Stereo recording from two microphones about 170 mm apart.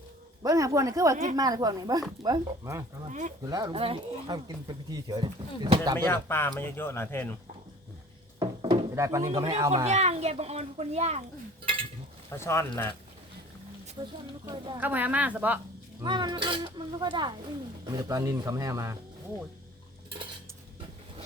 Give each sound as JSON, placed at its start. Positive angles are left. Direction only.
{"t": 0.4, "sound": "speech", "side_deg": -20}
{"t": 1.1, "sound": "a woman's voice", "side_deg": -45}
{"t": 1.4, "sound": "speech", "side_deg": -20}
{"t": 3.1, "sound": "a woman's voice", "side_deg": -45}
{"t": 3.4, "sound": "speech", "side_deg": -25}
{"t": 6.1, "sound": "speech", "side_deg": 15}
{"t": 8.4, "sound": "wood", "side_deg": -25}
{"t": 9.6, "sound": "speech", "side_deg": -20}
{"t": 9.8, "sound": "speech", "side_deg": -40}
{"t": 12.4, "sound": "speech", "side_deg": 15}
{"t": 14.0, "sound": "speech", "side_deg": -25}
{"t": 14.8, "sound": "a woman's voice", "side_deg": -10}
{"t": 16.0, "sound": "speech", "side_deg": -25}